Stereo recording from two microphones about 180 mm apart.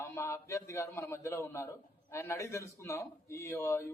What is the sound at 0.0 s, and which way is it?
A man's voice, 15° left (ahead or behind).